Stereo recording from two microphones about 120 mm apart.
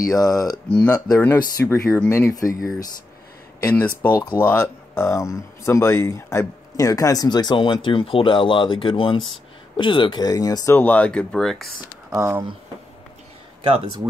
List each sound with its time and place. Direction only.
0.1 s speech: 30° left (ahead or behind)
3.7 s speech: 15° left (ahead or behind)
10.8 s speech: 15° left (ahead or behind)
12.1 s speech: 20° right (ahead or behind)